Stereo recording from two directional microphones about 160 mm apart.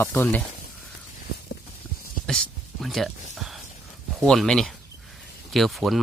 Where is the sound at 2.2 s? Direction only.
Centre (ahead or behind).